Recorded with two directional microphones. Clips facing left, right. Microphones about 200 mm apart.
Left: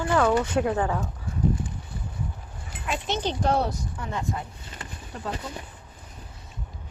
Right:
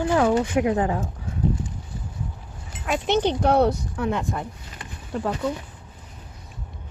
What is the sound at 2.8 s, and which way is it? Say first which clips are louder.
Speech: right 7 dB; 60° right (ahead or behind).